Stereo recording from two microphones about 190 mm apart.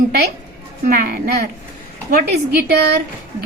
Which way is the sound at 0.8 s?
45° right (ahead or behind).